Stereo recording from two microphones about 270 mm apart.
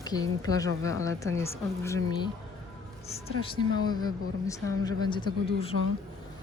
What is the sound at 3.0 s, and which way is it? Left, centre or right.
Speech, left.